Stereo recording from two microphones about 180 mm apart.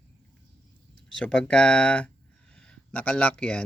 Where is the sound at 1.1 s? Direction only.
5° left (ahead or behind).